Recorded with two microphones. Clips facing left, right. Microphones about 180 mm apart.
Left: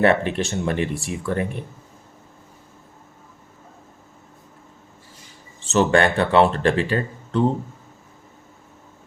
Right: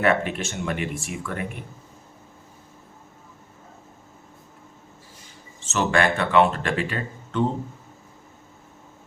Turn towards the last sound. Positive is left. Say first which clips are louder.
# left 4 dB
turn(degrees=35)  # may be behind; listen again after turning